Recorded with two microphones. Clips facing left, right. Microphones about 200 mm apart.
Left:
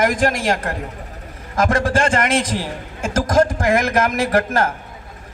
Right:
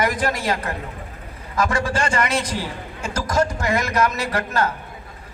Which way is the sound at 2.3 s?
90° left.